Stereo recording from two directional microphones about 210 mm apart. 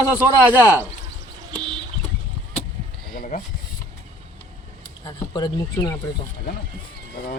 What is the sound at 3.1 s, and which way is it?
Speech, 40° left (ahead or behind).